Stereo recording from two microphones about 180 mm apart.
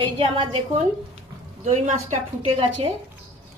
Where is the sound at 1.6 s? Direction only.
40° right (ahead or behind).